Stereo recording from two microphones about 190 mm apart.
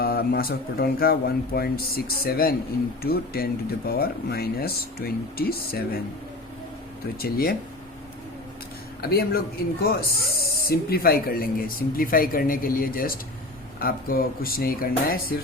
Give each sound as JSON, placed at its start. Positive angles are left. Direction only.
{"t": 0.0, "sound": "speech", "side_deg": 55}
{"t": 7.2, "sound": "speech", "side_deg": 55}
{"t": 9.0, "sound": "speech", "side_deg": 55}